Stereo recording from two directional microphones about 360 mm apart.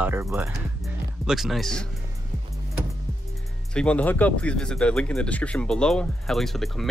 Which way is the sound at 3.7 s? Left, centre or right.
Centre.